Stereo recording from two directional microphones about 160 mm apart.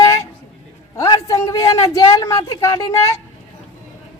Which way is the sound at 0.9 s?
20° left (ahead or behind).